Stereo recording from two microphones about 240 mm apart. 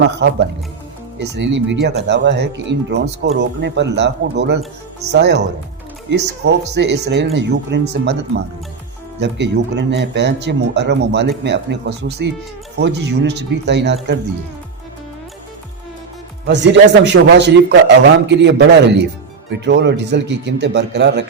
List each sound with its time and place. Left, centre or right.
1.2 s speech: right
9.2 s speech: right
16.5 s speech: right